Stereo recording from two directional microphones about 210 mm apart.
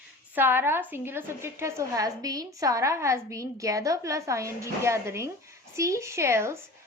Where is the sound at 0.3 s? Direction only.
10° right (ahead or behind).